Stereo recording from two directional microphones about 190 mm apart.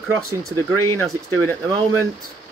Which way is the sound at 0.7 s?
15° left (ahead or behind).